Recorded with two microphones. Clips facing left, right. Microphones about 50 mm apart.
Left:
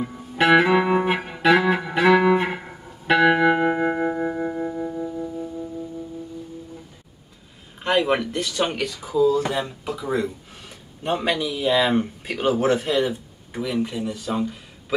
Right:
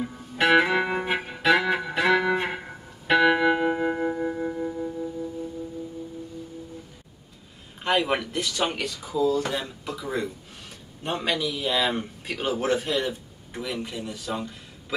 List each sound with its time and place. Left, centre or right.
0.0 s music: centre
0.7 s music: left
1.3 s music: centre
1.6 s music: left
2.5 s guitar: centre
3.3 s music: left
7.8 s speech: centre